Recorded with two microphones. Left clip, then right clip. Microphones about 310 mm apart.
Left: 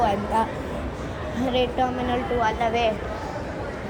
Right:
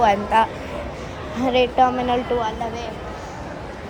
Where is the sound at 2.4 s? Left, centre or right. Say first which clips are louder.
Left 4 dB; centre.